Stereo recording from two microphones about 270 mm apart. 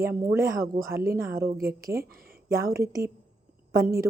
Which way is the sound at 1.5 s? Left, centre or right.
Right.